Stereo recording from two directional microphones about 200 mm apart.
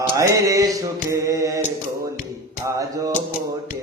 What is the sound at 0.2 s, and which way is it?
Mantra, 15° right (ahead or behind).